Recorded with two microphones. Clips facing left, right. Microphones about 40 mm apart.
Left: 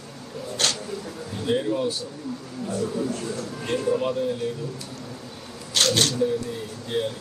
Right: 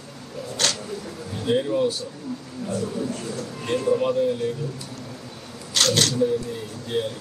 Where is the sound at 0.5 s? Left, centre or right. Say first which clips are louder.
Even; left.